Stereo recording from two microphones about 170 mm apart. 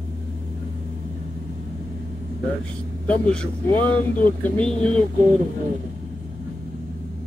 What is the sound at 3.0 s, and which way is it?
Speech, 5° left (ahead or behind).